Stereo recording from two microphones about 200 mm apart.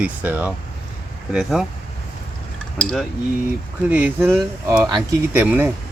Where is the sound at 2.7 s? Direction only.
5° left (ahead or behind).